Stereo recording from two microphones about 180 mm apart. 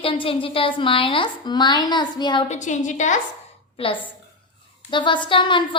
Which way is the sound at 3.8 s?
30° left (ahead or behind).